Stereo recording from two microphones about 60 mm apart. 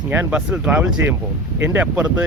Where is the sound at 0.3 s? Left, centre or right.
Centre.